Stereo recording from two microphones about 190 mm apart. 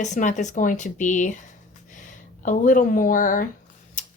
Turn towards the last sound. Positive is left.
turn(degrees=45)  # may be behind; listen again after turning